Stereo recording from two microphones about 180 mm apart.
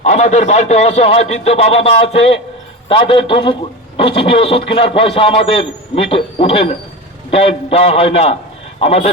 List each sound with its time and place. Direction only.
0.0 s a man's voice: 40° left (ahead or behind)